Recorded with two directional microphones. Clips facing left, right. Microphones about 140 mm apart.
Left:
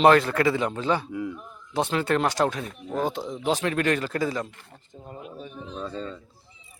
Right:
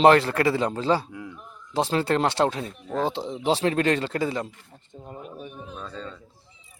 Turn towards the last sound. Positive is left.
turn(degrees=5)  # may be behind; listen again after turning